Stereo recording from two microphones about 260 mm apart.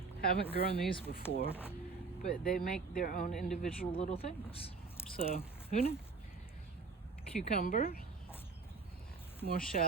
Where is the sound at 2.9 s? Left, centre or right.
Left.